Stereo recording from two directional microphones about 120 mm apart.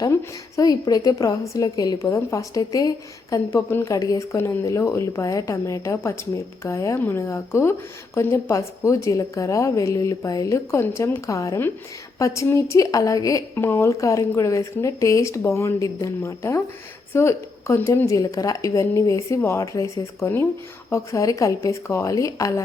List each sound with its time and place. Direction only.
0.5 s a woman's voice: 30° left (ahead or behind)